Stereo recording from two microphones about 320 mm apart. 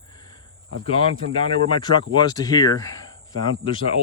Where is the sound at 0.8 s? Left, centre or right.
Centre.